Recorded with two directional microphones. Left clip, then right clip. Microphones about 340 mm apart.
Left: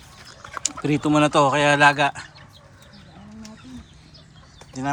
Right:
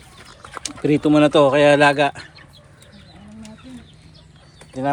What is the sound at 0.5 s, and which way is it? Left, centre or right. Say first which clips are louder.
Speech: right 4 dB; centre.